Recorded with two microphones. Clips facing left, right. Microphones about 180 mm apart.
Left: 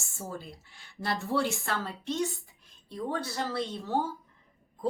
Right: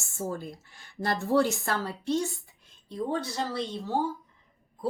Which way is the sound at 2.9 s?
20° right (ahead or behind).